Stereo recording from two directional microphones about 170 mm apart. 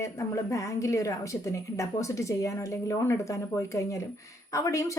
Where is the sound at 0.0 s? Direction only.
20° left (ahead or behind).